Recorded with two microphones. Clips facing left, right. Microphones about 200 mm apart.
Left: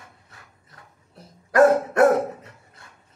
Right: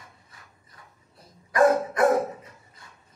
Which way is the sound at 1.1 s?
75° left (ahead or behind).